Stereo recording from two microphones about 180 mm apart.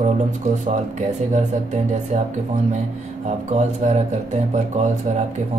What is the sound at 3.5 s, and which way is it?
Speech, 40° right (ahead or behind).